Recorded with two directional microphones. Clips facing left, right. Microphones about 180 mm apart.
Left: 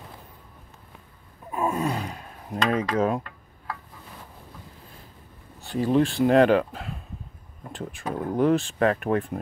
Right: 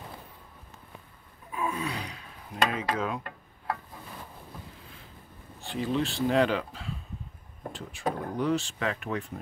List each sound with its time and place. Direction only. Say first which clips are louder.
1.5 s a sound: left 6 dB; 45° left (ahead or behind)
5.6 s speech: left 7 dB; 45° left (ahead or behind)
8.0 s speech: right 1 dB; 40° right (ahead or behind)
8.4 s speech: left 11 dB; 50° left (ahead or behind)